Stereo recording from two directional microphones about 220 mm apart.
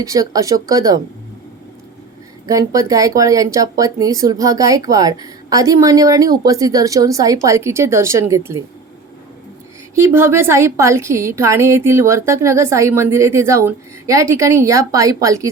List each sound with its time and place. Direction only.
0.0 s a woman's voice: 15° right (ahead or behind)
2.5 s a woman's voice: 15° right (ahead or behind)
9.9 s a woman's voice: 10° right (ahead or behind)